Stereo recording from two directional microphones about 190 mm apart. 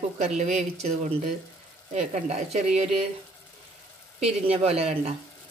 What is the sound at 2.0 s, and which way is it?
Speech, 35° right (ahead or behind).